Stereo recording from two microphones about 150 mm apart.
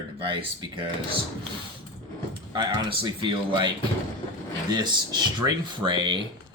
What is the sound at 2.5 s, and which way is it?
Speech, 30° right (ahead or behind).